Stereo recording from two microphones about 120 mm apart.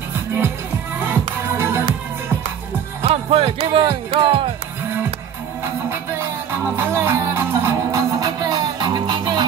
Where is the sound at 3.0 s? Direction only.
55° right (ahead or behind).